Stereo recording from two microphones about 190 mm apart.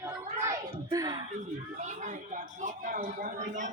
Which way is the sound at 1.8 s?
40° right (ahead or behind).